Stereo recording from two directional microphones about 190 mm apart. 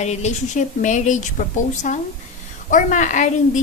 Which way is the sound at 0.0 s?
35° left (ahead or behind).